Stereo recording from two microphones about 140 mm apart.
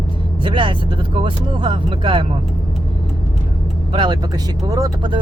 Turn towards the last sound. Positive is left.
turn(degrees=-25)  # may be behind; listen again after turning